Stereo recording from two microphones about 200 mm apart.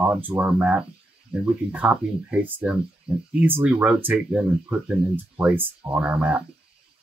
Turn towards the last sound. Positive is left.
turn(degrees=-5)  # may be behind; listen again after turning